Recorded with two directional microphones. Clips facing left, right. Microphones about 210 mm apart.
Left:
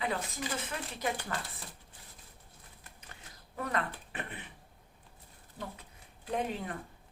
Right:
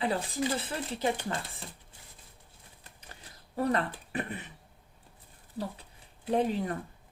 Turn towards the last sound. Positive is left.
turn(degrees=-30)  # may be behind; listen again after turning